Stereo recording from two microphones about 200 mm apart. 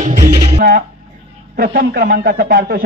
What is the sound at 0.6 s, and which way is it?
Speech, 50° right (ahead or behind).